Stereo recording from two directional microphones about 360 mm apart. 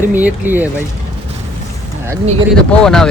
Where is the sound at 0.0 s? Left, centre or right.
Centre.